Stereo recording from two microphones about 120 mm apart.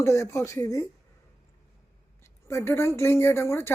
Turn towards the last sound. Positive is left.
turn(degrees=20)  # may be behind; listen again after turning